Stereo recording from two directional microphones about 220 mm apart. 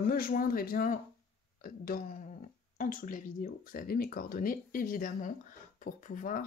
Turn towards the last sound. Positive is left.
turn(degrees=35)  # may be behind; listen again after turning